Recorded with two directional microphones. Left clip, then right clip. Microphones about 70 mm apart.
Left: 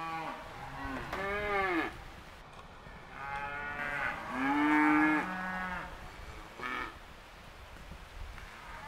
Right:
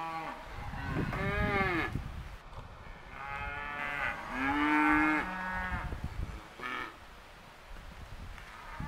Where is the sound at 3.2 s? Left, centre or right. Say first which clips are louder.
Left 1 dB; right.